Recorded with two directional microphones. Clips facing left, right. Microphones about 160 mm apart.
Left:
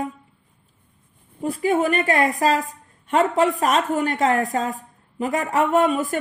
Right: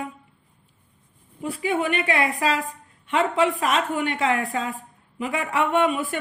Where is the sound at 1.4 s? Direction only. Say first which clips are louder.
Left 4 dB; 40° left (ahead or behind).